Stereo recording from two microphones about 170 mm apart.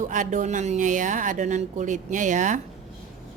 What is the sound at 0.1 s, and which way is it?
Speech, 50° right (ahead or behind).